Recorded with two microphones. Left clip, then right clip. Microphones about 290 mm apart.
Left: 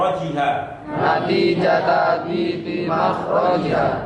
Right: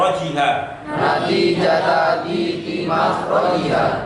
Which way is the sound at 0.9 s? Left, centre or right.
Centre.